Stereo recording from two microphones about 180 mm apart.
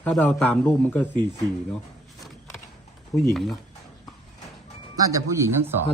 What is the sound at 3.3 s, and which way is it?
Speech, centre (ahead or behind).